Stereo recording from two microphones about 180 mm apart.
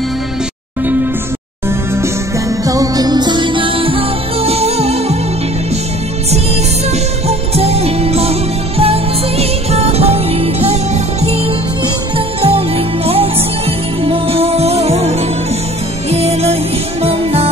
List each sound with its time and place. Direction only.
2.6 s music: 20° right (ahead or behind); by 5.1 s 35° right (ahead or behind)
6.3 s music: 35° right (ahead or behind)